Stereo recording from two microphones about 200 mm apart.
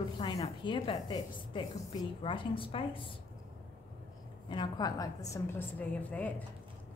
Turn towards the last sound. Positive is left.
turn(degrees=5)  # may be behind; listen again after turning